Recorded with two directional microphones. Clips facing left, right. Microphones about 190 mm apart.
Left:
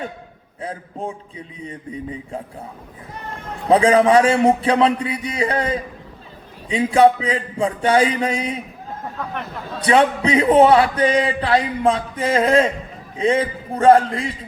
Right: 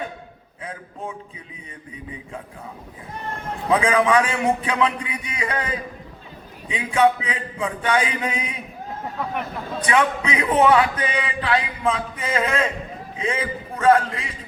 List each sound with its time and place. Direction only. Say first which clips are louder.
0.6 s a man's voice: left 5 dB; 35° left (ahead or behind)
3.7 s a man's voice: left 5 dB; 35° left (ahead or behind)
9.8 s a man's voice: left 5 dB; 35° left (ahead or behind)